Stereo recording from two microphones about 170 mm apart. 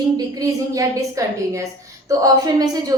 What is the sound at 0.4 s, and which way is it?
Speech, 20° right (ahead or behind).